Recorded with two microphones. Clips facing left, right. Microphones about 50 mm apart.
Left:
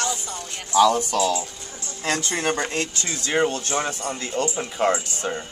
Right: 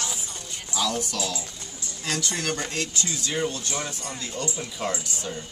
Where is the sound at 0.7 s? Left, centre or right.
Left.